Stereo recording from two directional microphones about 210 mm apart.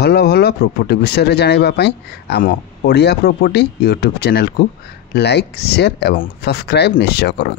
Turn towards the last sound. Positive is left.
turn(degrees=50)  # may be behind; listen again after turning